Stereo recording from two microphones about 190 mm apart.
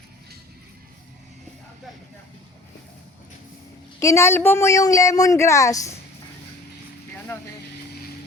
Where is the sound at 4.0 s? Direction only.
15° left (ahead or behind).